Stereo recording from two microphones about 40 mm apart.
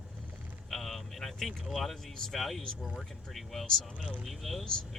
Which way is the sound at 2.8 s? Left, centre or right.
Centre.